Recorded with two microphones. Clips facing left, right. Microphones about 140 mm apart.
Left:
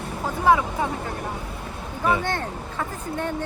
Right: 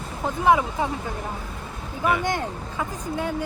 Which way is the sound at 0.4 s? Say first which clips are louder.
Even; 20° right (ahead or behind).